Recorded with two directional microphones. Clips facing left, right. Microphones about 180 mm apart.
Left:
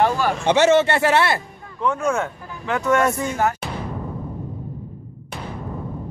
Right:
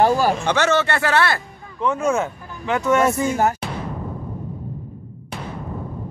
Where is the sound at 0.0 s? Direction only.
35° right (ahead or behind).